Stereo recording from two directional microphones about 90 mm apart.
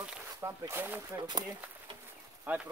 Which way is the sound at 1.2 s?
50° right (ahead or behind).